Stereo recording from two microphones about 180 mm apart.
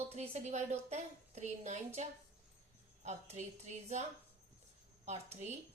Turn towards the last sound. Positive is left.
turn(degrees=-35)  # may be behind; listen again after turning